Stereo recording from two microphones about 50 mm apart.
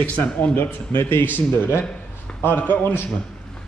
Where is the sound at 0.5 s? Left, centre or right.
Left.